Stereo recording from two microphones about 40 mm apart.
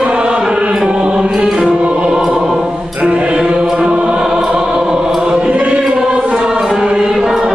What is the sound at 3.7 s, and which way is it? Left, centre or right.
Choir, right.